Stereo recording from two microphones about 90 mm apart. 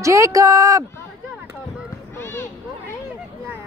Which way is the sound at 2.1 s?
25° left (ahead or behind).